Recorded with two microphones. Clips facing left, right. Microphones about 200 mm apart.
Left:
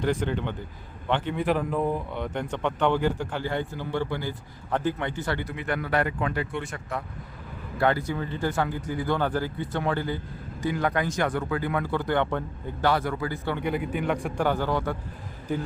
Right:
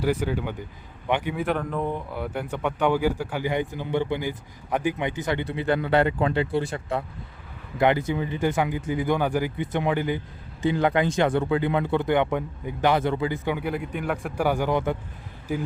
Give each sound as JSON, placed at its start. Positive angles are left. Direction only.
{"t": 0.0, "sound": "speech", "side_deg": -5}
{"t": 5.5, "sound": "speech", "side_deg": -30}
{"t": 7.8, "sound": "speech", "side_deg": -20}
{"t": 13.6, "sound": "speech", "side_deg": 0}